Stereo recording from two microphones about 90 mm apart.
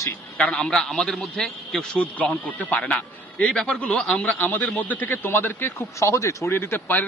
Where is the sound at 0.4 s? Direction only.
10° left (ahead or behind).